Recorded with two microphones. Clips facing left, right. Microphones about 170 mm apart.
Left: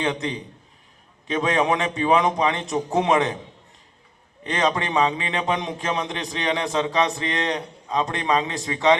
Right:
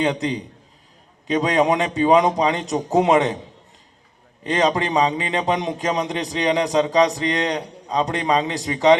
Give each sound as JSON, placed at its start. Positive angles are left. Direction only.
{"t": 0.0, "sound": "a man's voice", "side_deg": -35}
{"t": 4.4, "sound": "a man's voice", "side_deg": -35}